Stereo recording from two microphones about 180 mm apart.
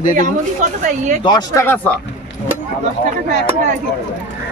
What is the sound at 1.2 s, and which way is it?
Speech, 25° left (ahead or behind).